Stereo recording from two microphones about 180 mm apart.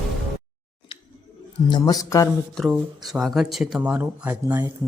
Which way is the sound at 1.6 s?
25° left (ahead or behind).